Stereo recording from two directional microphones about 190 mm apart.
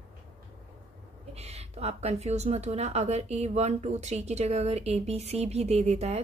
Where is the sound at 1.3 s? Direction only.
35° right (ahead or behind).